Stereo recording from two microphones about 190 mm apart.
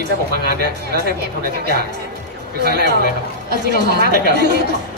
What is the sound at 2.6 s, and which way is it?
A woman's voice, 60° right (ahead or behind).